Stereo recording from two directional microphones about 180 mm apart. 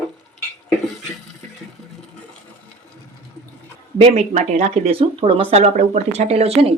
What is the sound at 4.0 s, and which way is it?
Speech, 40° right (ahead or behind).